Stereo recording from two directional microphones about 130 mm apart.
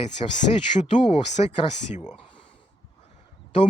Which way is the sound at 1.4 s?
60° left (ahead or behind).